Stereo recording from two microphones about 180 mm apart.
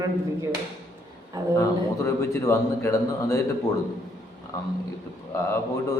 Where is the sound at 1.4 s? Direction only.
20° right (ahead or behind).